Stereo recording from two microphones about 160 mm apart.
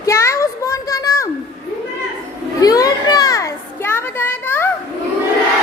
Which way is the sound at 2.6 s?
25° left (ahead or behind).